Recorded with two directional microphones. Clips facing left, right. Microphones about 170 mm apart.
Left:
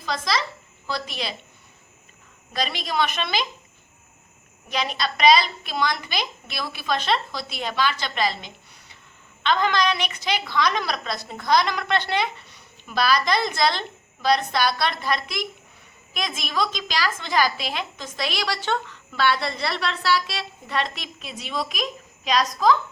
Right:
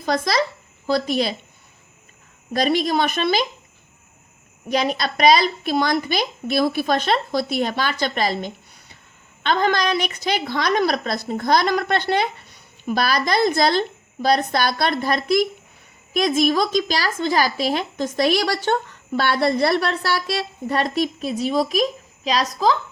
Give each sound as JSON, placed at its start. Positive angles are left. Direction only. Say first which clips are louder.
{"t": 0.0, "sound": "a woman's voice", "louder": "right 6 dB", "side_deg": -45}
{"t": 2.5, "sound": "a woman's voice", "louder": "right 9 dB", "side_deg": -45}
{"t": 4.7, "sound": "a woman's voice", "louder": "right 5 dB", "side_deg": -40}